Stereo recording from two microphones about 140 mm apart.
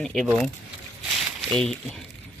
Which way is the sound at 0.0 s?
Centre (ahead or behind).